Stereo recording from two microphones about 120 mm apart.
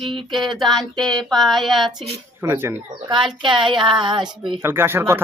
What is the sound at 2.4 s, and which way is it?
Speech, 20° right (ahead or behind).